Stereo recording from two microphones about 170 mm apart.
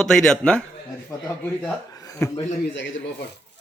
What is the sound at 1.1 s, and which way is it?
Speech, 15° left (ahead or behind).